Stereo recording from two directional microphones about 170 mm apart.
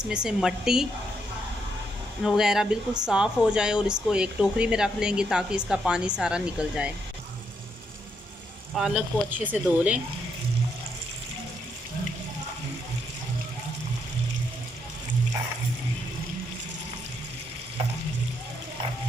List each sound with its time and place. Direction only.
0.0 s speech: 5° right (ahead or behind)
2.2 s speech: 5° right (ahead or behind)
8.7 s speech: 5° right (ahead or behind)